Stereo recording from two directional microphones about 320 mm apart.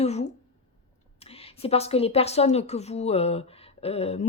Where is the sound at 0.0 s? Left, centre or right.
Centre.